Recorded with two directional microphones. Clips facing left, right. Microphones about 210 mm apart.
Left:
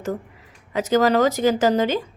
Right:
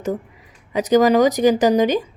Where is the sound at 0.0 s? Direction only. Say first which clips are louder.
Right 3 dB; 15° right (ahead or behind).